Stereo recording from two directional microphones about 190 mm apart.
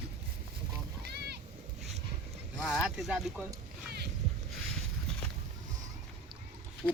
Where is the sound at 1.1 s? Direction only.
60° right (ahead or behind).